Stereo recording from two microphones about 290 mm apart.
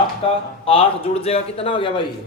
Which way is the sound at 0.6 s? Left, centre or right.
Centre.